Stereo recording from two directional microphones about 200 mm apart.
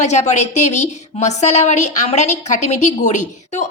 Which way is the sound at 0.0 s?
35° left (ahead or behind).